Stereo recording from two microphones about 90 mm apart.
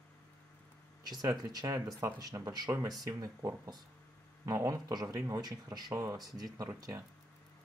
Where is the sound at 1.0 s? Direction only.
45° right (ahead or behind).